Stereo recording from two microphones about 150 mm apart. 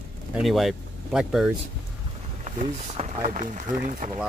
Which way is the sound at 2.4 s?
50° right (ahead or behind).